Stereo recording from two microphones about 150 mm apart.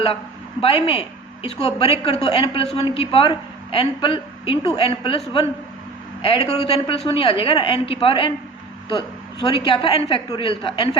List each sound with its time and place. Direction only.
0.6 s a woman's voice: 40° left (ahead or behind)
6.2 s a woman's voice: 40° left (ahead or behind)